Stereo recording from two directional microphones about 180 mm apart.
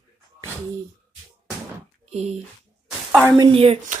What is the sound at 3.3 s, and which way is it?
Speech, 25° right (ahead or behind).